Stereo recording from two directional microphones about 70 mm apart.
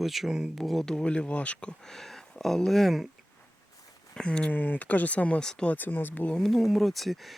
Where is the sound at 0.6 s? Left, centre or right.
Centre.